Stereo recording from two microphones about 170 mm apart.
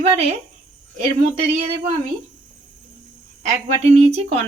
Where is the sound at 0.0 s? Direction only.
35° right (ahead or behind).